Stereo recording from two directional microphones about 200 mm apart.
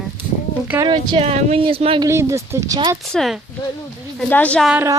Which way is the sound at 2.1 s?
15° right (ahead or behind).